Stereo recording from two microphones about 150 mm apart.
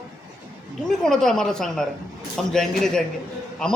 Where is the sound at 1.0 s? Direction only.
5° left (ahead or behind).